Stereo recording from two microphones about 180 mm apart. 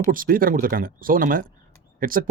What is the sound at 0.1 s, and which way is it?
Speech, 50° right (ahead or behind).